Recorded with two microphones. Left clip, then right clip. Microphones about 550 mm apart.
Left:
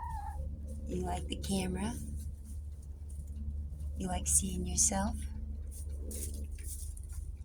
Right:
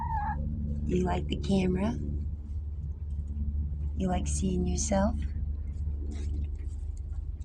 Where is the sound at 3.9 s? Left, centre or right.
Left.